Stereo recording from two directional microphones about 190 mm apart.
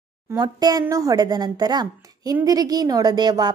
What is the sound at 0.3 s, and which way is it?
A woman's voice, 20° right (ahead or behind).